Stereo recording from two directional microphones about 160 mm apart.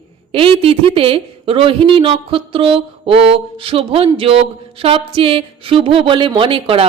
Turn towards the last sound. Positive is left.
turn(degrees=-35)  # may be behind; listen again after turning